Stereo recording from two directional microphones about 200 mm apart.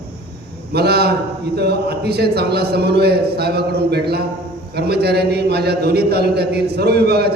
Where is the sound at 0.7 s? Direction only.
55° right (ahead or behind).